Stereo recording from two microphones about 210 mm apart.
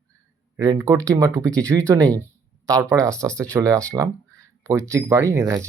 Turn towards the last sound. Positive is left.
turn(degrees=-15)  # may be behind; listen again after turning